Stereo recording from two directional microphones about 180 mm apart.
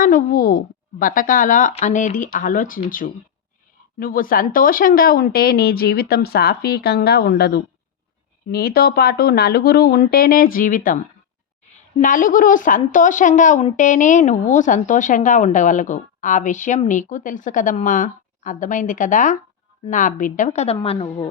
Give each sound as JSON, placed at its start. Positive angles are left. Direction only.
{"t": 0.0, "sound": "a woman's voice", "side_deg": 50}